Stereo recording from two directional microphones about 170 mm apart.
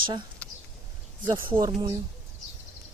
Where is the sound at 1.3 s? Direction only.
15° right (ahead or behind).